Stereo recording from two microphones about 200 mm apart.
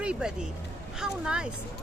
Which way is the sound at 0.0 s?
5° right (ahead or behind).